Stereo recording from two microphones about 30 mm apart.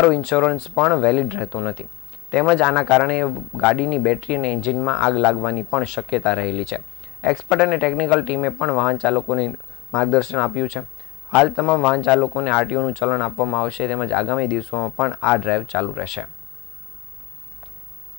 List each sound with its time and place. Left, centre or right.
0.0 s speech: centre